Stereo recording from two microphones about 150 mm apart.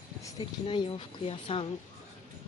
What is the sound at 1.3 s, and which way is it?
Speech, 40° left (ahead or behind).